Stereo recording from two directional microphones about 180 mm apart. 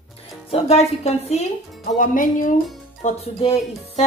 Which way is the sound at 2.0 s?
50° left (ahead or behind).